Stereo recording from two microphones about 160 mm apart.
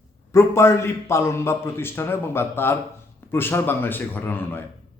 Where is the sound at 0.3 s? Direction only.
15° left (ahead or behind).